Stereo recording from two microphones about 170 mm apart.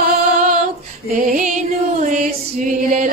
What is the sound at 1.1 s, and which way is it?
Female singing, 50° right (ahead or behind).